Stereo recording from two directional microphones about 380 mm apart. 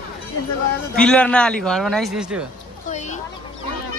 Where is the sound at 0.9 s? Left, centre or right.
Centre.